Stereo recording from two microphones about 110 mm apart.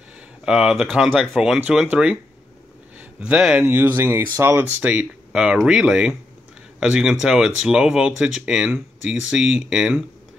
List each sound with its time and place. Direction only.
0.5 s speech: 5° right (ahead or behind); by 4.6 s 25° right (ahead or behind)
4.8 s speech: 10° right (ahead or behind)